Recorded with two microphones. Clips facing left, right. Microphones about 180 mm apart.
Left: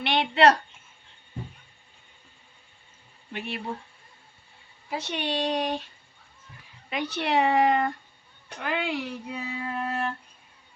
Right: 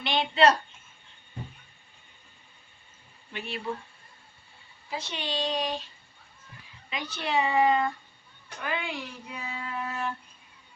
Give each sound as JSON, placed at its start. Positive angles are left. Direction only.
{"t": 0.0, "sound": "a woman's voice", "side_deg": 65}
{"t": 3.3, "sound": "child singing", "side_deg": 60}
{"t": 4.9, "sound": "child singing", "side_deg": 60}
{"t": 6.9, "sound": "child singing", "side_deg": 60}